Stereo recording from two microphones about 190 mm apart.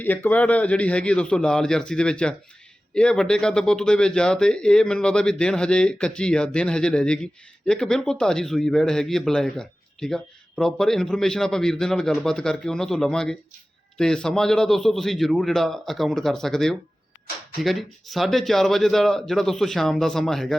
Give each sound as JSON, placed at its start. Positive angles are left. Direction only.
{"t": 0.0, "sound": "speech", "side_deg": 10}